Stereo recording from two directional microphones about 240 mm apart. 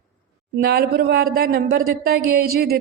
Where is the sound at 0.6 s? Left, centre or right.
Right.